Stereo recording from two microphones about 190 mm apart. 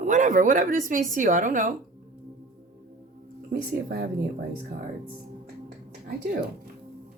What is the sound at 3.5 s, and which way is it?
Speech, 50° right (ahead or behind).